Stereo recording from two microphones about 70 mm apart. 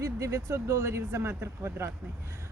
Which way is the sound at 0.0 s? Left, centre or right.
Right.